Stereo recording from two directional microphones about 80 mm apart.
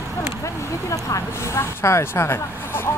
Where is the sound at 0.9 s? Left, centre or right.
Left.